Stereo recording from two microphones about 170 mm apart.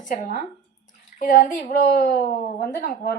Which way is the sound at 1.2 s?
50° left (ahead or behind).